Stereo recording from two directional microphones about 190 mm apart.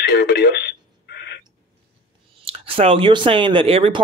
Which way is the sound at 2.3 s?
30° right (ahead or behind).